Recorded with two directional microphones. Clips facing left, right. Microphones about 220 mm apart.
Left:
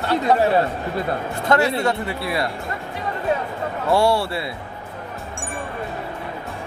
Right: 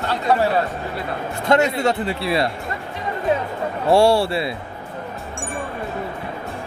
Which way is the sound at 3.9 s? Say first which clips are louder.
Right 4 dB; 25° right (ahead or behind).